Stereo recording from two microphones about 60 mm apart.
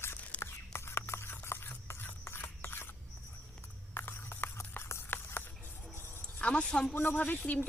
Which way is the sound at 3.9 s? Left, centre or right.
Left.